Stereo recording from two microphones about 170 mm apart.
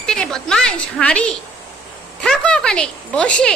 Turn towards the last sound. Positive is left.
turn(degrees=5)  # may be behind; listen again after turning